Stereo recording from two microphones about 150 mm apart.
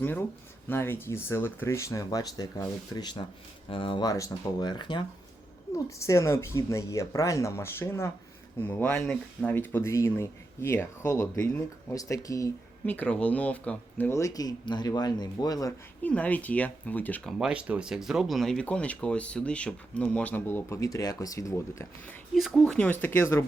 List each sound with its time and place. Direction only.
0.0 s speech: 15° left (ahead or behind); by 5.0 s 30° left (ahead or behind)
5.7 s speech: 20° left (ahead or behind)
12.8 s speech: 10° left (ahead or behind)
16.0 s speech: 10° left (ahead or behind)
17.3 s speech: 5° right (ahead or behind); by 22.1 s 20° left (ahead or behind)
22.4 s speech: centre (ahead or behind); by 23.4 s 15° left (ahead or behind)